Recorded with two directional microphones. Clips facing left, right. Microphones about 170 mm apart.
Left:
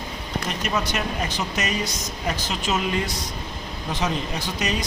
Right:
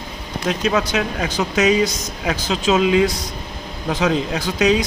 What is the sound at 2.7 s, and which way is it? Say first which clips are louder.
Speech: right 10 dB; 90° right.